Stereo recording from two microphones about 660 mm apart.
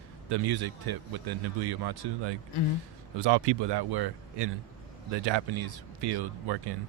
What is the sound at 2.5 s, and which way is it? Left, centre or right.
Speech, left.